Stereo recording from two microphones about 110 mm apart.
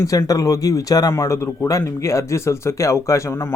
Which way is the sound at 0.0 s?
30° left (ahead or behind).